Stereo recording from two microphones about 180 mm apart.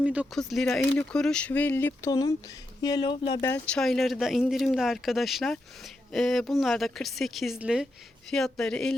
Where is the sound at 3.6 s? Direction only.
5° left (ahead or behind).